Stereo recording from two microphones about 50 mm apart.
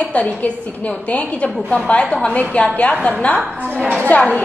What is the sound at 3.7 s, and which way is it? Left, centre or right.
Speech, right.